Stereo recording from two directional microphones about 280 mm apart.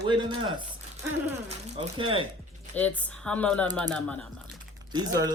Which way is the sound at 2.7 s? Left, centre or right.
Centre.